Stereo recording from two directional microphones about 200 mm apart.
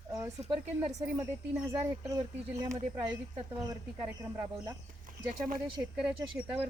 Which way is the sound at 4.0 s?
10° right (ahead or behind).